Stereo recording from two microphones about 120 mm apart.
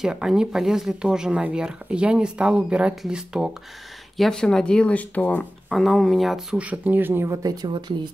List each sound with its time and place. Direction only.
0.0 s speech: 5° right (ahead or behind)
4.2 s speech: 5° left (ahead or behind)
5.7 s speech: centre (ahead or behind); by 7.5 s 25° right (ahead or behind)
7.6 s speech: 40° right (ahead or behind)